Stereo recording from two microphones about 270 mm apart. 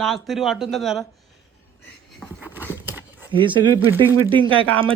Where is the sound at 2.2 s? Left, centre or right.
Centre.